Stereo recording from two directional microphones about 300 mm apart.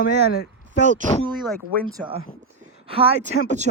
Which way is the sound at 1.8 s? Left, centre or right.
Centre.